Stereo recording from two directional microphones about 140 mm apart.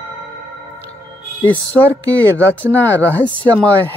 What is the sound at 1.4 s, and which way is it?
Speech, 10° left (ahead or behind).